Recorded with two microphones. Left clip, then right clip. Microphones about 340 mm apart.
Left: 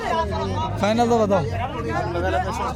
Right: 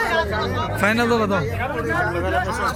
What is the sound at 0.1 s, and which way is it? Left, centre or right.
Chatter, left.